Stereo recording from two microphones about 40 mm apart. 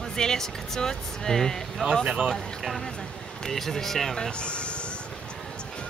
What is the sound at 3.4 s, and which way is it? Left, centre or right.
Speech, centre.